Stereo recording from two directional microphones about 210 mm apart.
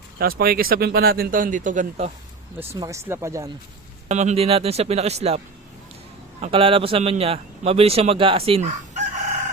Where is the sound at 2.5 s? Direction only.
15° right (ahead or behind).